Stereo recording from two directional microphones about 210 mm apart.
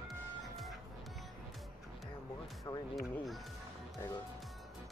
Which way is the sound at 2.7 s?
15° left (ahead or behind).